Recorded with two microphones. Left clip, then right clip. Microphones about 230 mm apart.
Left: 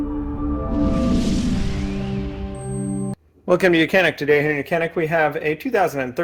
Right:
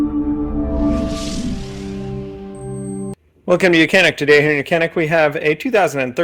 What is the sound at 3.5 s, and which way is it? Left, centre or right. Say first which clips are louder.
A man's voice: right 3 dB; right.